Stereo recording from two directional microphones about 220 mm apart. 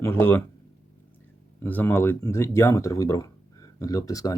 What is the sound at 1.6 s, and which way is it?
Speech, 10° left (ahead or behind).